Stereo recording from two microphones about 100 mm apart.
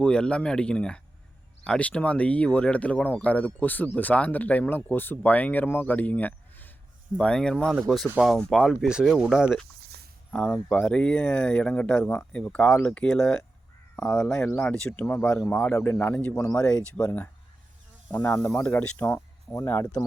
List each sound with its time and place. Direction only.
0.0 s speech: 10° left (ahead or behind); by 9.6 s 5° right (ahead or behind)
10.3 s speech: 10° left (ahead or behind)
16.3 s speech: 30° left (ahead or behind)
16.6 s speech: 10° left (ahead or behind)
18.1 s speech: 20° left (ahead or behind)